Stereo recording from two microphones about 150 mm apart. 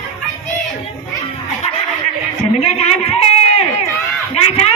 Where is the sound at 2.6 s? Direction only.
45° left (ahead or behind).